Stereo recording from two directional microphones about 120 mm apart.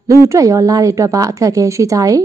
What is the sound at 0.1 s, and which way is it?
A woman's voice, 25° right (ahead or behind).